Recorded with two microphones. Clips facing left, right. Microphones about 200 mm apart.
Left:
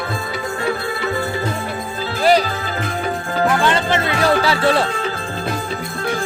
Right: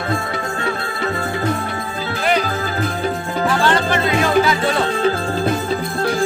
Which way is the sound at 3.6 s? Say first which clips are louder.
Right 1 dB; 20° left (ahead or behind).